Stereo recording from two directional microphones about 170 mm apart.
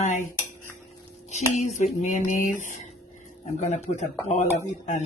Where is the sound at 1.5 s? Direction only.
40° left (ahead or behind).